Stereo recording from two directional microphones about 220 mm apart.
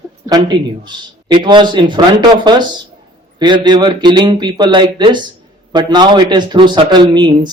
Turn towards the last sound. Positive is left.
turn(degrees=-20)  # may be behind; listen again after turning